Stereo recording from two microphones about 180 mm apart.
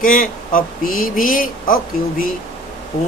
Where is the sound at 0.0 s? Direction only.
50° left (ahead or behind).